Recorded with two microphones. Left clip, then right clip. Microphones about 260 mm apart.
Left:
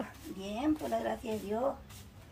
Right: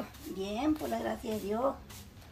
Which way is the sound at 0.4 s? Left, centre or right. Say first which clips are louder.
Right 1 dB; centre.